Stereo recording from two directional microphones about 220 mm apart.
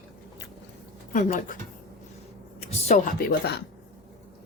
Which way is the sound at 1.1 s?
35° left (ahead or behind).